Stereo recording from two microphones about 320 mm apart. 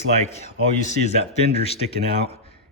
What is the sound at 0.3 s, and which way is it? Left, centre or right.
Speech, centre.